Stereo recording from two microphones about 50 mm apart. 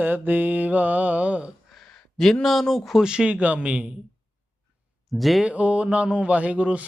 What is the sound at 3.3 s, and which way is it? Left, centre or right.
Speech, right.